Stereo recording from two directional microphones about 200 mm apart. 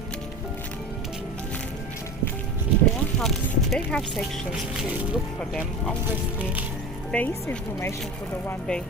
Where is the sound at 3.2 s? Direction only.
Centre (ahead or behind).